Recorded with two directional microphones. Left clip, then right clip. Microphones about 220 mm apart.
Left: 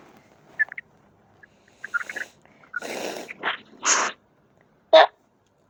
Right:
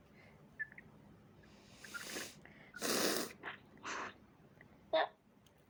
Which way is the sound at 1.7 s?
15° right (ahead or behind).